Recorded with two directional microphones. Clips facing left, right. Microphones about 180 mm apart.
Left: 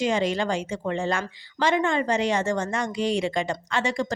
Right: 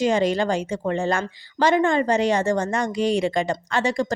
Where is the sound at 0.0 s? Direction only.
40° right (ahead or behind).